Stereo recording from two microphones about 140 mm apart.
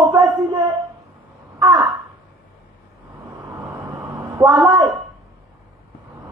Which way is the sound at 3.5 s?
15° right (ahead or behind).